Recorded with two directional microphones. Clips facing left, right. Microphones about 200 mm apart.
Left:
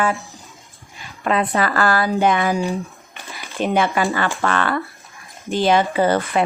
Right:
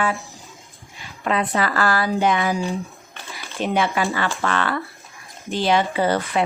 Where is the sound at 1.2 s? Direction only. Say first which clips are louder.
Left 2 dB; 50° left (ahead or behind).